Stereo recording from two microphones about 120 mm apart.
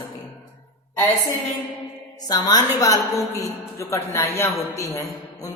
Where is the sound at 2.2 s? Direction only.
35° left (ahead or behind).